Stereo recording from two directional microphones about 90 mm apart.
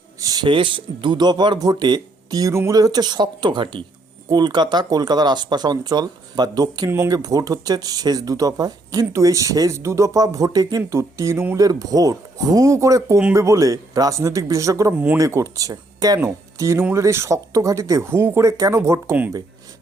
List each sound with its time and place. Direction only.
0.2 s a sound: 45° right (ahead or behind)
0.4 s speech: 65° right (ahead or behind); by 2.4 s 50° right (ahead or behind)
2.4 s speech: 35° right (ahead or behind)
2.7 s speech: 45° right (ahead or behind); by 3.8 s 65° right (ahead or behind)
4.3 s speech: 55° right (ahead or behind); by 14.9 s 35° right (ahead or behind)
14.9 s speech: 20° right (ahead or behind)
15.2 s speech: 35° right (ahead or behind)
16.2 s speech: 30° right (ahead or behind)